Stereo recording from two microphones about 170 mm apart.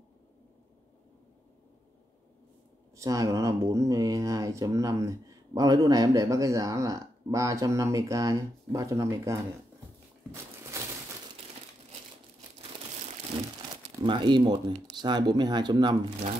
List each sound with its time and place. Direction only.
3.0 s speech: 20° right (ahead or behind)
10.3 s a sound: 15° right (ahead or behind)
14.0 s speech: 30° right (ahead or behind)